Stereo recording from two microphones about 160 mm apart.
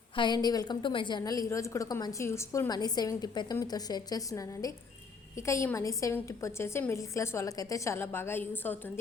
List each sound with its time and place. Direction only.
0.2 s a woman's voice: 25° left (ahead or behind)